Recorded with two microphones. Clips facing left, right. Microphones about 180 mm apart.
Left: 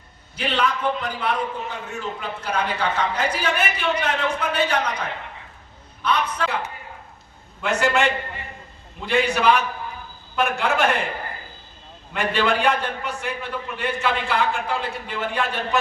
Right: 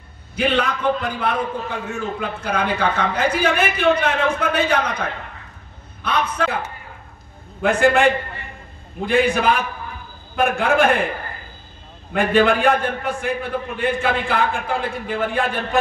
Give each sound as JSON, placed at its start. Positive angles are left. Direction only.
{"t": 0.4, "sound": "a man's voice", "side_deg": -55}
{"t": 6.0, "sound": "a man's voice", "side_deg": -50}
{"t": 7.6, "sound": "a man's voice", "side_deg": -50}
{"t": 12.1, "sound": "a man's voice", "side_deg": -50}